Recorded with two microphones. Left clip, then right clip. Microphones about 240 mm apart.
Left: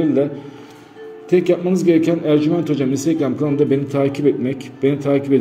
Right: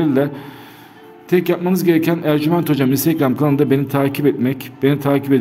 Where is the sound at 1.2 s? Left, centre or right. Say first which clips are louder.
Left 1 dB; right.